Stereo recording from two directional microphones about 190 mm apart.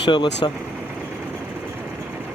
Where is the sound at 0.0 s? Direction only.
25° left (ahead or behind).